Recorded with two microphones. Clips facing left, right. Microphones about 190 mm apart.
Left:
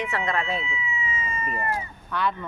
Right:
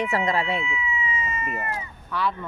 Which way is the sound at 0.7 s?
45° left (ahead or behind).